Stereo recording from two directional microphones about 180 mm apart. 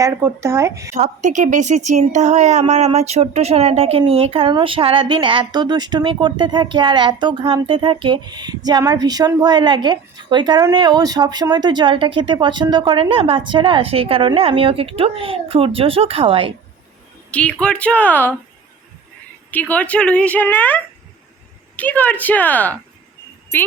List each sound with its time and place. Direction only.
0.0 s speech: 15° right (ahead or behind)
0.9 s a woman's voice: 40° right (ahead or behind)
17.3 s a woman's voice: 5° left (ahead or behind)
19.5 s a woman's voice: 10° left (ahead or behind)